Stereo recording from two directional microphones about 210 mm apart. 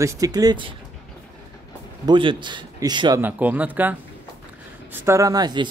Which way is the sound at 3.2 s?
5° right (ahead or behind).